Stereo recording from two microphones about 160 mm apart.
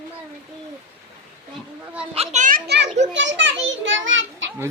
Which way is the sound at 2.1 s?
45° right (ahead or behind).